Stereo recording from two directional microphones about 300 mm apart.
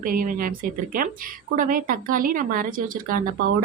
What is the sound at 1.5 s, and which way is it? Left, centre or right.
A woman's voice, right.